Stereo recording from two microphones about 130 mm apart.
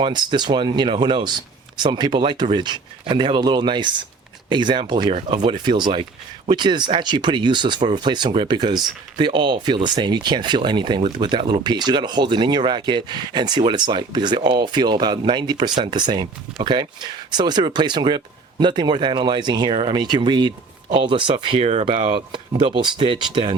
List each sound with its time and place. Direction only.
0.0 s speech: 35° right (ahead or behind)
21.3 s speech: 50° right (ahead or behind)